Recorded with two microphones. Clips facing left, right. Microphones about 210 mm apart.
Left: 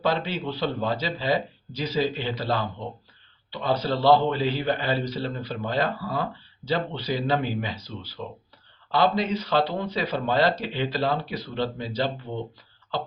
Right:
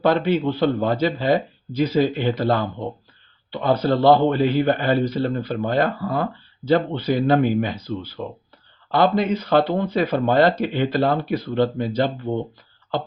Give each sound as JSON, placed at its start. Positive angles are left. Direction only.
{"t": 0.0, "sound": "speech", "side_deg": -55}